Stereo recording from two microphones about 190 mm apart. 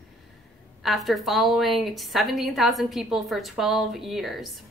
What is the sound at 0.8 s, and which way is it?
A woman's voice, centre (ahead or behind).